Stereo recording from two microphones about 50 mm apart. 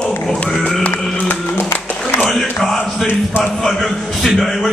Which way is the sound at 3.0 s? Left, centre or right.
Left.